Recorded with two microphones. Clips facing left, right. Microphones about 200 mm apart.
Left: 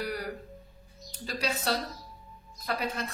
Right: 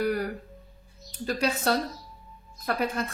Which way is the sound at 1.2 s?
50° right (ahead or behind).